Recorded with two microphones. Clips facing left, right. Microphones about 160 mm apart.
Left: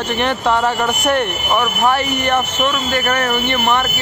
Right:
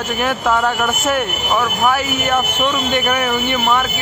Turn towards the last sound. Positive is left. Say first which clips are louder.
# even
turn(degrees=-10)  # may be behind; listen again after turning